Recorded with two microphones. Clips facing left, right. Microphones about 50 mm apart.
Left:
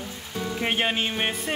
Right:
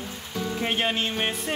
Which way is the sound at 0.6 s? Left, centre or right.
Centre.